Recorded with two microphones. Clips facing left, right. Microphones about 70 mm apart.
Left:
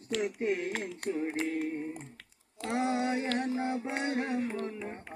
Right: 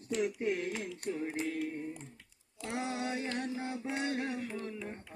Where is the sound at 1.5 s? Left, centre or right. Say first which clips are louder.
Left 3 dB; left.